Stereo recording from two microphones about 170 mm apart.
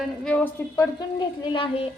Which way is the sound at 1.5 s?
30° left (ahead or behind).